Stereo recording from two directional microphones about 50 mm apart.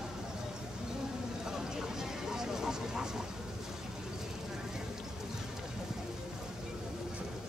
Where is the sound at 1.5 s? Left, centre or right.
Centre.